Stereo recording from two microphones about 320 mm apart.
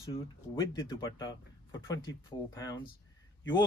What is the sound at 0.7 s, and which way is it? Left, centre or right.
Speech, centre.